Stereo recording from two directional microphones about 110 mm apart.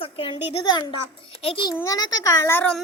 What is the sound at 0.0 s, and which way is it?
A woman's voice, 55° left (ahead or behind).